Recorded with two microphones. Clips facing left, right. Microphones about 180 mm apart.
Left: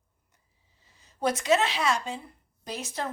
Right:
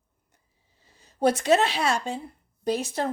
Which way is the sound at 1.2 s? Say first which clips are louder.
Right 4 dB; 30° right (ahead or behind).